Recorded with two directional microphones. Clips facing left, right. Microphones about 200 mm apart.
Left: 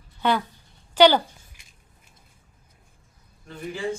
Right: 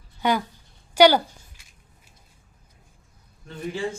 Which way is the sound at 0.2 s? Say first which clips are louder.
Even; 10° right (ahead or behind).